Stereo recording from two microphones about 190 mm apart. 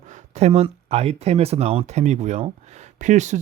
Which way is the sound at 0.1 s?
35° right (ahead or behind).